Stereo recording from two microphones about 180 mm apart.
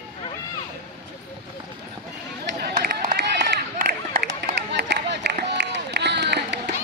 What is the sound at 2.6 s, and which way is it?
Run, 60° right (ahead or behind).